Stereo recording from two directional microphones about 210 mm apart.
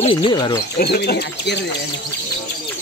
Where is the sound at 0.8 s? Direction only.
50° left (ahead or behind).